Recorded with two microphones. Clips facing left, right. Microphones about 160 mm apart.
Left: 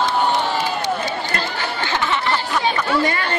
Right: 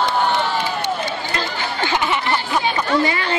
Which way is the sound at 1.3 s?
55° left (ahead or behind).